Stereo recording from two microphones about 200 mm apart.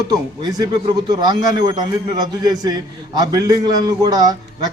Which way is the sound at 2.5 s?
20° right (ahead or behind).